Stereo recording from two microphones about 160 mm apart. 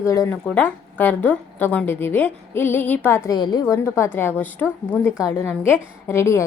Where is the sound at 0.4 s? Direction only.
10° left (ahead or behind).